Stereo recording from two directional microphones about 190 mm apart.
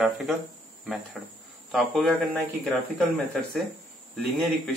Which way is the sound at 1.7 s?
Centre (ahead or behind).